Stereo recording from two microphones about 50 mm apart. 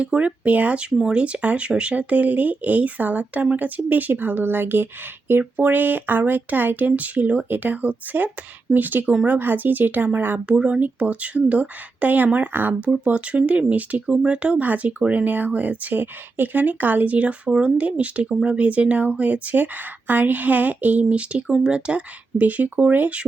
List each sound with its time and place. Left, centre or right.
0.0 s speech: right
10.6 s speech: right
13.1 s speech: right